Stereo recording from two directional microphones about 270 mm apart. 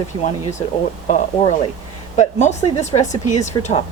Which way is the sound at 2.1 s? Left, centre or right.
Left.